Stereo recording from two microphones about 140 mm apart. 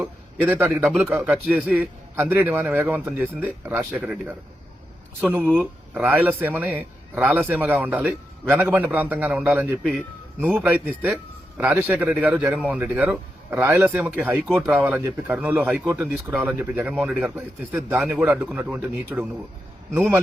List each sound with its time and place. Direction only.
0.0 s a sound: 15° right (ahead or behind)
0.9 s a man's voice: 10° right (ahead or behind)
5.5 s a man's voice: 10° right (ahead or behind)